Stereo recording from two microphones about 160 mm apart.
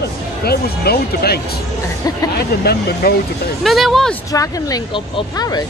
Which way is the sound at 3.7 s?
Centre (ahead or behind).